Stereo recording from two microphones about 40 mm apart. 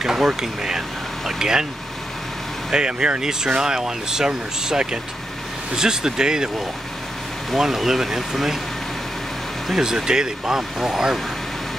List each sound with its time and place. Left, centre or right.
0.0 s vehicle: centre
2.7 s speech: right
7.5 s speech: centre
9.8 s speech: centre